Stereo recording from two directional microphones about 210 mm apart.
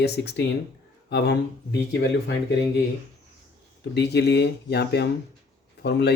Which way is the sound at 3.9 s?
50° left (ahead or behind).